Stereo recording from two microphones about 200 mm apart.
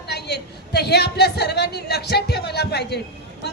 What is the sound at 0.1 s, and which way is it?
A woman's voice, 55° left (ahead or behind).